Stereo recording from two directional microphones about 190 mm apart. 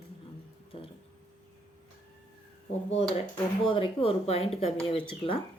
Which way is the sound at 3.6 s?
30° left (ahead or behind).